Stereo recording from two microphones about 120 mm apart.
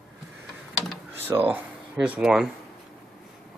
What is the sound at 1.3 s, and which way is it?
Speech, 15° right (ahead or behind).